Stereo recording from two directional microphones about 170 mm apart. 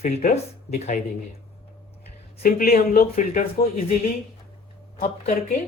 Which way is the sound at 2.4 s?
60° left (ahead or behind).